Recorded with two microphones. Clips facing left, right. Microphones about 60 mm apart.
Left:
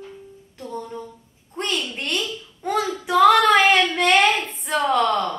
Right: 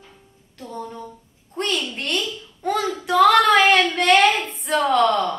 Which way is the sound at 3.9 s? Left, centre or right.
Centre.